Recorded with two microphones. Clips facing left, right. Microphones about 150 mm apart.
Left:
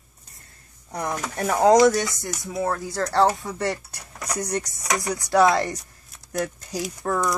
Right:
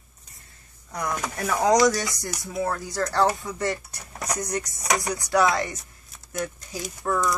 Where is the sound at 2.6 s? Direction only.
25° left (ahead or behind).